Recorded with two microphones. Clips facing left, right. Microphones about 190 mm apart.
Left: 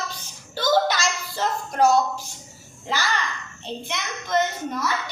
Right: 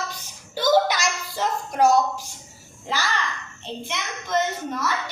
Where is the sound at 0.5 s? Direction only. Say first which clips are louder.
Right 1 dB; 15° right (ahead or behind).